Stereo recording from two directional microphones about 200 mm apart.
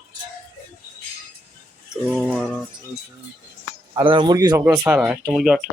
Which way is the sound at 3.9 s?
25° right (ahead or behind).